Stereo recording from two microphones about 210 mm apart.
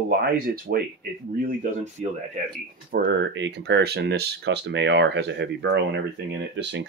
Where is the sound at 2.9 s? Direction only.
50° right (ahead or behind).